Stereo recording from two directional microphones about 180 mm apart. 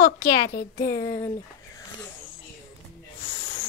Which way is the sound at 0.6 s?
55° left (ahead or behind).